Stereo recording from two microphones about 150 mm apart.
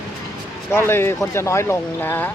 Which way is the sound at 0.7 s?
15° left (ahead or behind).